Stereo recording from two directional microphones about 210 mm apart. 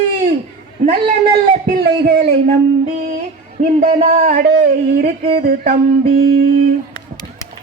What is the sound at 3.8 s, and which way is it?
Speech, 30° right (ahead or behind).